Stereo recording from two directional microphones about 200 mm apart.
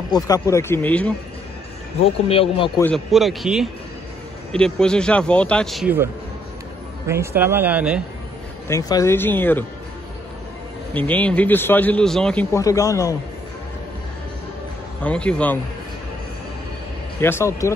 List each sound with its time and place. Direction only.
0.1 s a man's voice: 15° left (ahead or behind)
2.2 s speech: 30° left (ahead or behind)
2.8 s speech: centre (ahead or behind)
7.1 s speech: 10° right (ahead or behind)
8.6 s a man's voice: 15° left (ahead or behind)
10.9 s a man's voice: 10° left (ahead or behind)
12.5 s a man's voice: 15° left (ahead or behind)
15.0 s a man's voice: 5° left (ahead or behind)
17.2 s a man's voice: 10° left (ahead or behind)